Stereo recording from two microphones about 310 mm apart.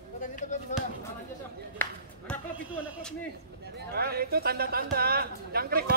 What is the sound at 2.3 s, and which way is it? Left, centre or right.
Speech, centre.